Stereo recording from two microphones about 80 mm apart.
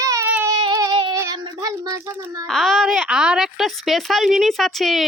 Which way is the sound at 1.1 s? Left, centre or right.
Right.